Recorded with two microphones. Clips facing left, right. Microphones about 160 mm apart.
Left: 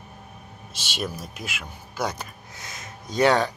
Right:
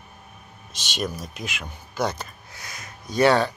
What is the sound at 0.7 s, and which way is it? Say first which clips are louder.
Speech: right 2 dB; 10° left (ahead or behind).